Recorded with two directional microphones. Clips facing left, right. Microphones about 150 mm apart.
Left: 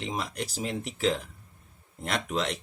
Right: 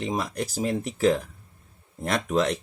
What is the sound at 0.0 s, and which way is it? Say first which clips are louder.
Speech: right 5 dB; 40° right (ahead or behind).